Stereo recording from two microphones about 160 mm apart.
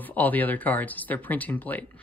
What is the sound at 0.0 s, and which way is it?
Speech, 10° left (ahead or behind).